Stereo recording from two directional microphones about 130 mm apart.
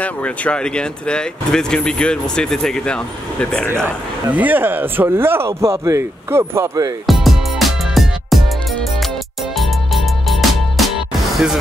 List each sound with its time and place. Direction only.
0.0 s speech: 10° left (ahead or behind)
3.8 s a man's voice: 15° right (ahead or behind)
7.1 s music: centre (ahead or behind)
9.6 s music: centre (ahead or behind)